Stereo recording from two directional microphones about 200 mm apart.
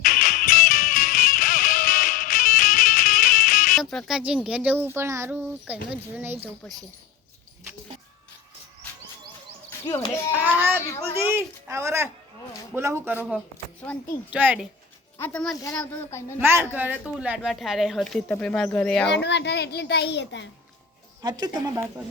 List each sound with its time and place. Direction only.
0.0 s music: 45° left (ahead or behind)
3.8 s speech: centre (ahead or behind)
9.6 s a child's voice: 10° left (ahead or behind)
11.1 s speech: 10° right (ahead or behind)
14.3 s speech: 10° right (ahead or behind)
15.2 s a child's voice: 5° left (ahead or behind)
16.4 s speech: 10° right (ahead or behind); by 19.0 s 5° left (ahead or behind)
19.1 s a child's voice: 60° left (ahead or behind)
21.2 s speech: 20° right (ahead or behind)